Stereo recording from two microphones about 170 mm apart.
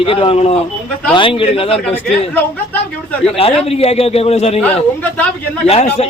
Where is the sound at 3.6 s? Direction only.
35° left (ahead or behind).